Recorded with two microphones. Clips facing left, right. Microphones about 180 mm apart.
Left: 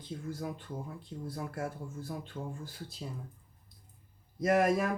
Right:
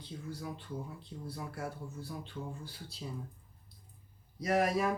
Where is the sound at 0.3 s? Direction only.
50° left (ahead or behind).